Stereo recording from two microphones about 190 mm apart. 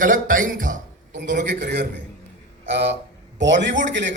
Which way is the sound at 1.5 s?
60° right (ahead or behind).